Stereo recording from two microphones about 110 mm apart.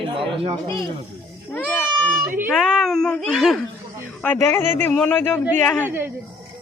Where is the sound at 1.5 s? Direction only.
15° left (ahead or behind).